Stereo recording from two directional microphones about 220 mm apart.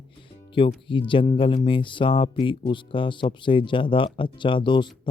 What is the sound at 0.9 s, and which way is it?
Speech, 25° left (ahead or behind).